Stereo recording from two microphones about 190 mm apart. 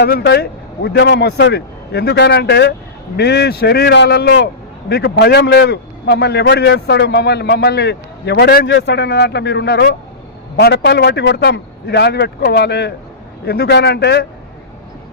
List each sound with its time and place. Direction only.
0.0 s a man's voice: 60° left (ahead or behind)